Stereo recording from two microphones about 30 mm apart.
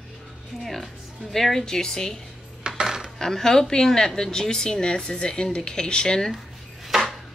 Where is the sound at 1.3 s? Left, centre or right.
Centre.